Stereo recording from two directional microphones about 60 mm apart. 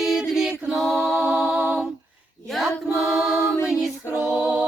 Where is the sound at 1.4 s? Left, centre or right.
Right.